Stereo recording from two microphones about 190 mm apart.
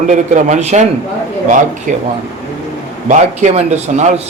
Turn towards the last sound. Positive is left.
turn(degrees=-35)  # may be behind; listen again after turning